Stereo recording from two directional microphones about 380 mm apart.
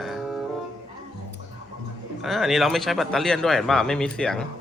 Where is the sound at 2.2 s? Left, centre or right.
Centre.